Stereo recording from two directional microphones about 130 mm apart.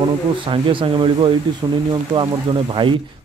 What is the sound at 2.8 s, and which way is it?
Speech, 40° right (ahead or behind).